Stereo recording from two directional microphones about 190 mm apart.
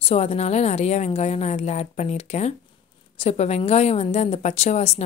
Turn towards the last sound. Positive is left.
turn(degrees=35)  # may be behind; listen again after turning